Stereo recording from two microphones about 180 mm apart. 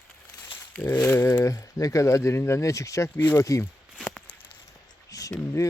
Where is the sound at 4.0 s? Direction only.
5° left (ahead or behind).